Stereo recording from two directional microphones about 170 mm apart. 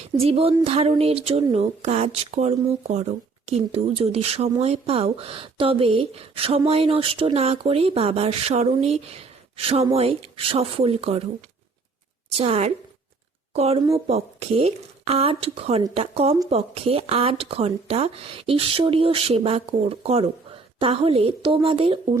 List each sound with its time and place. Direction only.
0.2 s speech: 35° right (ahead or behind)
12.3 s speech: 35° right (ahead or behind)